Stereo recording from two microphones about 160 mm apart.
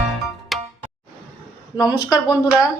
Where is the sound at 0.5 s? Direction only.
Centre (ahead or behind).